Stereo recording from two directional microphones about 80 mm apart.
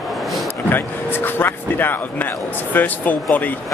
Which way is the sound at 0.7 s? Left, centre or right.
Left.